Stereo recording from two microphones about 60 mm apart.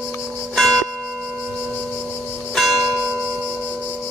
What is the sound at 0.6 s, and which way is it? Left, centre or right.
Church bell, centre.